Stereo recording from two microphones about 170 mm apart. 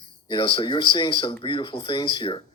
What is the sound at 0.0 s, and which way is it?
Speech, 25° left (ahead or behind).